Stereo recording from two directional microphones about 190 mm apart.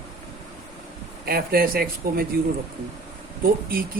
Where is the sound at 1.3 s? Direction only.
55° right (ahead or behind).